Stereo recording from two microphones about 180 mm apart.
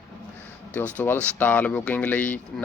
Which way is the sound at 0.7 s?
10° left (ahead or behind).